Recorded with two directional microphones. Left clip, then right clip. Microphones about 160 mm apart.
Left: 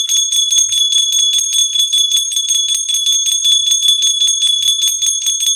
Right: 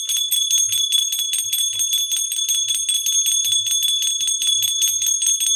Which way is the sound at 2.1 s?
15° left (ahead or behind).